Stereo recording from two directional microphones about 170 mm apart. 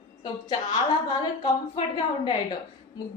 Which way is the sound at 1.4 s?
25° left (ahead or behind).